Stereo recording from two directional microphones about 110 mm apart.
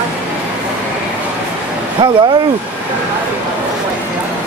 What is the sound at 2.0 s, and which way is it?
Speech, 45° right (ahead or behind).